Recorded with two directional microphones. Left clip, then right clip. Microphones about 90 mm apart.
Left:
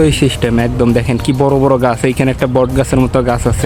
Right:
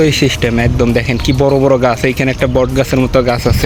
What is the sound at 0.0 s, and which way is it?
Speech, 30° left (ahead or behind).